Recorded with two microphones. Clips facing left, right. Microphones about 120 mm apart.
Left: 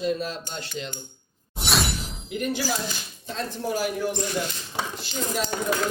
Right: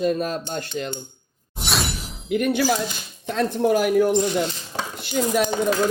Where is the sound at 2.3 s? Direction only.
60° right (ahead or behind).